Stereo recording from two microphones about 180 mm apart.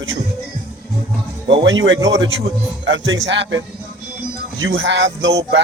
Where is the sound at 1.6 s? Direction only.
90° right.